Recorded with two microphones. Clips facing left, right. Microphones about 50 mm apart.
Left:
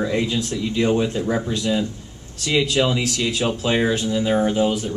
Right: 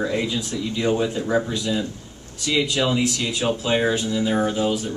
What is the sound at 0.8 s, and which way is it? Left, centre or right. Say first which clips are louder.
Speech: left 2 dB; centre.